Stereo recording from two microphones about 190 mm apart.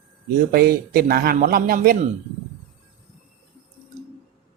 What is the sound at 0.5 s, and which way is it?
Speech, 55° right (ahead or behind).